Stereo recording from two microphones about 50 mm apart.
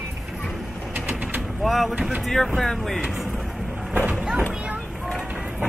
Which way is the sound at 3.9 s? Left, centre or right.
Right.